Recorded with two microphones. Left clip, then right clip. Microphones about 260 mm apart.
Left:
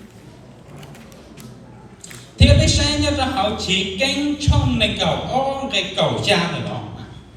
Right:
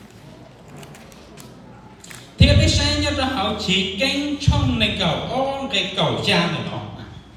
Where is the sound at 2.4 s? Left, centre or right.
Centre.